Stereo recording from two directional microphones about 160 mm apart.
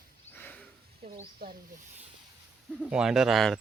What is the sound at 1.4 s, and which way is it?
Speech, 70° right (ahead or behind).